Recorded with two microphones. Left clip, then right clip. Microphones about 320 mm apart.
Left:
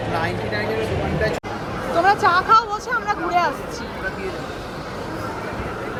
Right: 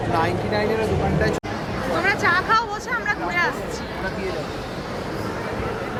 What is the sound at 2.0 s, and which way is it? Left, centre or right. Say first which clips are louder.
Speech: left 4 dB; centre.